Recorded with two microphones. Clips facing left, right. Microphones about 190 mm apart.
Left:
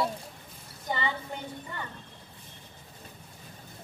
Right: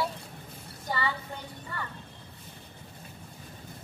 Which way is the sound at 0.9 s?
20° left (ahead or behind).